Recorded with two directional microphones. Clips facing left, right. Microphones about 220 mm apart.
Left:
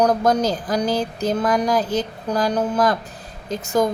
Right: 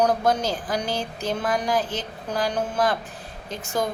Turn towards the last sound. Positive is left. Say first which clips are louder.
# left 7 dB
turn(degrees=40)  # may be behind; listen again after turning